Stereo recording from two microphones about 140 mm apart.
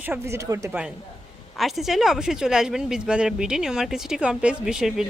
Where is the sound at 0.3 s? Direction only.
20° right (ahead or behind).